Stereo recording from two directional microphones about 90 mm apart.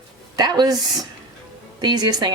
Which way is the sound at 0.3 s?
50° right (ahead or behind).